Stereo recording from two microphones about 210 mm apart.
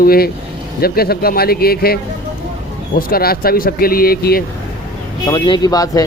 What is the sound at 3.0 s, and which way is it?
A man's voice, 45° left (ahead or behind).